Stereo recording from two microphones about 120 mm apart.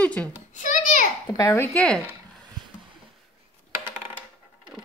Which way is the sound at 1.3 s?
30° left (ahead or behind).